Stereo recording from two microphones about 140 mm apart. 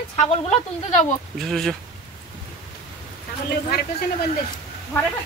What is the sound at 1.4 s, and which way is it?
Speech, 5° left (ahead or behind).